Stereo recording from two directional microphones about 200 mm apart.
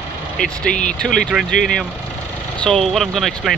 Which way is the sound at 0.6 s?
5° left (ahead or behind).